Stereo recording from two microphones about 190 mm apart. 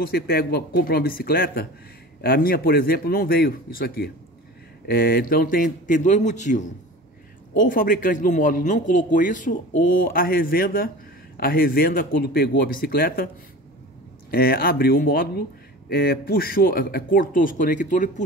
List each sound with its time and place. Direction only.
0.0 s speech: 55° left (ahead or behind)
14.3 s speech: 50° left (ahead or behind)